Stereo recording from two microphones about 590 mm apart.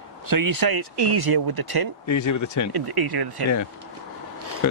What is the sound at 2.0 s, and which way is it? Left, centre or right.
Speech, left.